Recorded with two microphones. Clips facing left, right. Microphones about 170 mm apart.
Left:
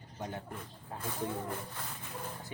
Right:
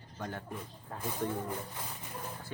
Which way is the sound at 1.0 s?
15° right (ahead or behind).